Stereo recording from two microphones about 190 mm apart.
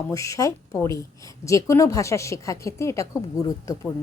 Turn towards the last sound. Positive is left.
turn(degrees=20)  # may be behind; listen again after turning